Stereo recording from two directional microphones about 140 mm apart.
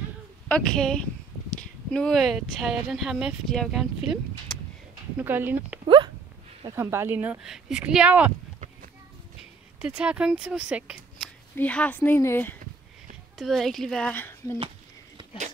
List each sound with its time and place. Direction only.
0.5 s speech: 5° left (ahead or behind)
5.2 s speech: 15° right (ahead or behind)
5.9 s a sound: 35° right (ahead or behind)
6.7 s speech: 20° right (ahead or behind)
9.8 s speech: 10° right (ahead or behind)
11.5 s speech: 10° left (ahead or behind)
13.4 s speech: centre (ahead or behind)